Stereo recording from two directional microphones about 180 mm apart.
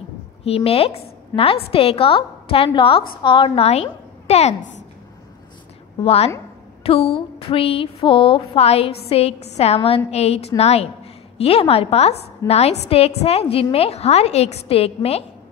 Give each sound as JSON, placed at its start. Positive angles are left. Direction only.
{"t": 0.4, "sound": "a woman's voice", "side_deg": 35}
{"t": 6.0, "sound": "a woman's voice", "side_deg": 35}
{"t": 6.8, "sound": "a sound", "side_deg": 30}
{"t": 7.2, "sound": "a woman's voice", "side_deg": 30}